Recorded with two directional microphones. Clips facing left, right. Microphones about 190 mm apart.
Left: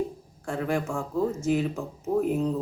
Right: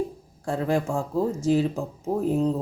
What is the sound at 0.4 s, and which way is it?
Speech, 35° right (ahead or behind).